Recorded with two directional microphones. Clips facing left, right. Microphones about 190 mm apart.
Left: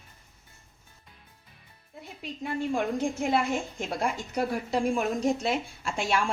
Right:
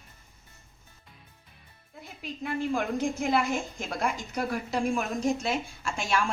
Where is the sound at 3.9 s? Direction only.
25° left (ahead or behind).